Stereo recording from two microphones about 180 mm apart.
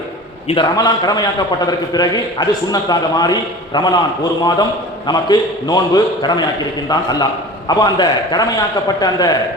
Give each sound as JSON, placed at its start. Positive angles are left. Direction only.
{"t": 0.4, "sound": "a man's voice", "side_deg": 25}